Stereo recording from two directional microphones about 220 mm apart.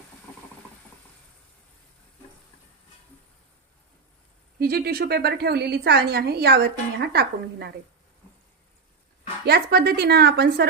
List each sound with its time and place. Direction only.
4.6 s a woman's voice: 45° right (ahead or behind)
9.5 s a woman's voice: 45° right (ahead or behind)